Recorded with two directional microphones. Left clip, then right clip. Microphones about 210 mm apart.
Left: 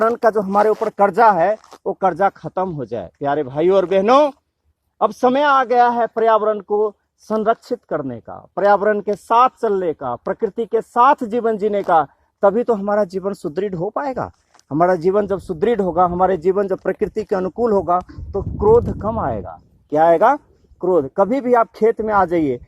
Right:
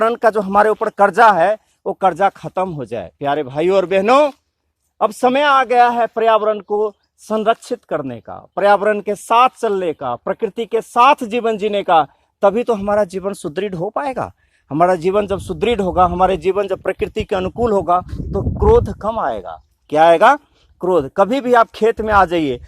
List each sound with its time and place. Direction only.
0.0 s speech: 35° right (ahead or behind)
0.5 s speech: 20° right (ahead or behind)